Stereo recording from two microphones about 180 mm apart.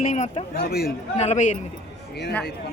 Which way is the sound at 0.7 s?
60° left (ahead or behind).